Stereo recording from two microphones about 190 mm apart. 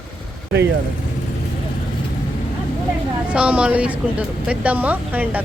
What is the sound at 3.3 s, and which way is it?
A woman's voice, 5° right (ahead or behind).